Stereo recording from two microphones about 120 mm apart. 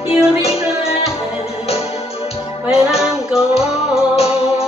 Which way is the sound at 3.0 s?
5° right (ahead or behind).